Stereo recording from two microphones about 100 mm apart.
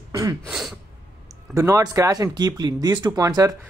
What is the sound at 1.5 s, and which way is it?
Speech, 30° right (ahead or behind).